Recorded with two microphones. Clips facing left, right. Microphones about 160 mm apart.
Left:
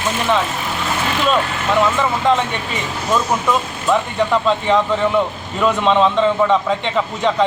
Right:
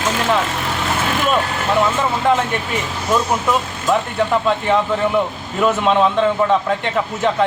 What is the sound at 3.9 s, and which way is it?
Speech, 5° right (ahead or behind).